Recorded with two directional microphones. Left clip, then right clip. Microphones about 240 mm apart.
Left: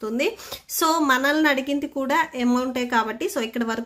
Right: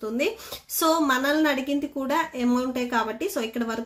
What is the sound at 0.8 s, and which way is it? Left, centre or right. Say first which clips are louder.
A woman's voice: left 2 dB; left.